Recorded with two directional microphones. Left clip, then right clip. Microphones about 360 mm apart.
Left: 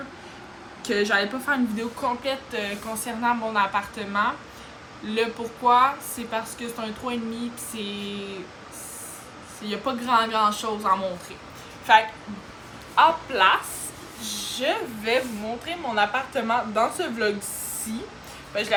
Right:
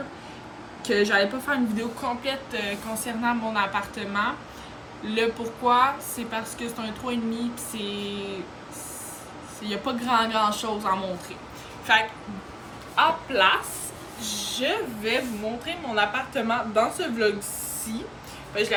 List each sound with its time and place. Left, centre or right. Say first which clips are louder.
0.9 s speech: right 1 dB; centre
9.6 s speech: left 1 dB; centre
14.3 s a sound: right 1 dB; centre
14.6 s speech: left 1 dB; centre
18.5 s speech: right 2 dB; centre